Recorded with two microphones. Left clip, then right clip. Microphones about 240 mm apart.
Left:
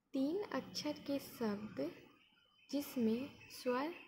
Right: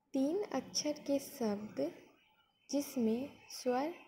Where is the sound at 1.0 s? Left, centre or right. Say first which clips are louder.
Right 5 dB; centre.